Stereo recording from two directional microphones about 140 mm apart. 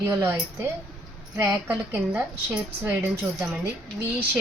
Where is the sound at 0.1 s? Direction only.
20° right (ahead or behind).